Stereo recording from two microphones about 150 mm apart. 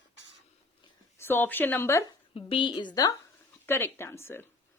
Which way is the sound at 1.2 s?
15° left (ahead or behind).